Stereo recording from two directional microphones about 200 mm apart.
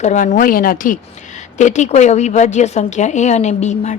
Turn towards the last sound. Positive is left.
turn(degrees=35)  # may be behind; listen again after turning